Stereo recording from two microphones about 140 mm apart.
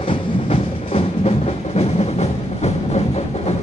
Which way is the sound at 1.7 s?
50° left (ahead or behind).